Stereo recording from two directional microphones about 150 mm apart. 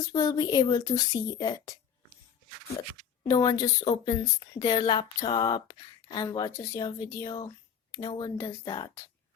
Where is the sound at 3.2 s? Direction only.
25° left (ahead or behind).